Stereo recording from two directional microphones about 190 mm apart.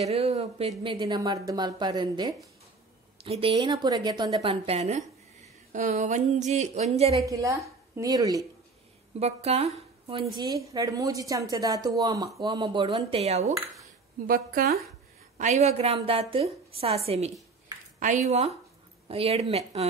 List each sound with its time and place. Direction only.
0.0 s a woman's voice: 35° right (ahead or behind)
7.2 s a woman's voice: 15° right (ahead or behind)
9.2 s a woman's voice: 35° right (ahead or behind)
10.3 s a woman's voice: 20° right (ahead or behind)
13.2 s a woman's voice: 35° right (ahead or behind)
14.2 s a woman's voice: 45° right (ahead or behind)